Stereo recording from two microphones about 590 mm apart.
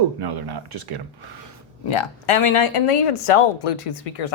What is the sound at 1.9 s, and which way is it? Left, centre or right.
Speech, left.